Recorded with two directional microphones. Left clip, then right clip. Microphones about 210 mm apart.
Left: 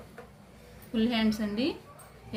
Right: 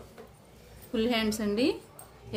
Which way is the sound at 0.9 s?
60° right (ahead or behind).